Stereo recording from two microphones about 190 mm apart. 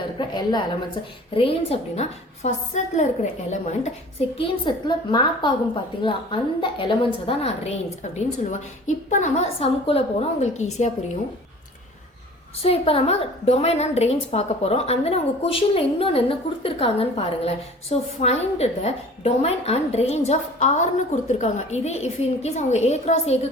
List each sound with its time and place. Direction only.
0.2 s a woman's voice: 25° left (ahead or behind); by 3.9 s 40° left (ahead or behind)
4.4 s a woman's voice: 25° left (ahead or behind)
12.5 s a woman's voice: 30° left (ahead or behind)